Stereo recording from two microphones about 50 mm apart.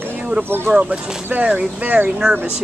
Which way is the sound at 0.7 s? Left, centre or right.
Right.